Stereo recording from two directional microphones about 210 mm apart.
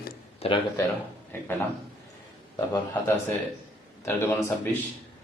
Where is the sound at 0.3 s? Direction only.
25° left (ahead or behind).